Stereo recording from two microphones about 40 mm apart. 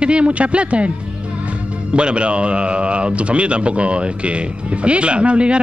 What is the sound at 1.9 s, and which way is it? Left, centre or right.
Speech, right.